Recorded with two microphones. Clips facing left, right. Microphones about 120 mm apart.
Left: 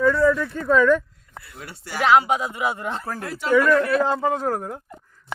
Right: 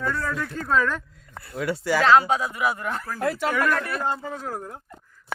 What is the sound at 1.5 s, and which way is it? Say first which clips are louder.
Speech: right 7 dB; 90° right.